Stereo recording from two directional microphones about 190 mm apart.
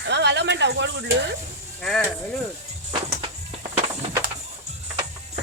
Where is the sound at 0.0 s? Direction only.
65° right (ahead or behind).